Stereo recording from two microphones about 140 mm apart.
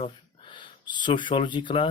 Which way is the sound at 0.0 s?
35° left (ahead or behind).